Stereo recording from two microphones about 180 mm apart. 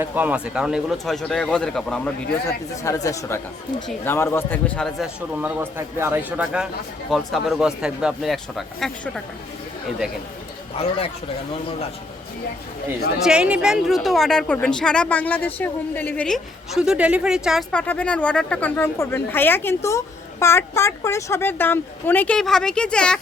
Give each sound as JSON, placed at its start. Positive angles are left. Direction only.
{"t": 0.0, "sound": "a woman's voice", "side_deg": -10}
{"t": 2.8, "sound": "speech", "side_deg": 15}
{"t": 5.3, "sound": "a man's voice", "side_deg": -10}
{"t": 10.8, "sound": "speech", "side_deg": 35}
{"t": 13.2, "sound": "a woman's voice", "side_deg": -5}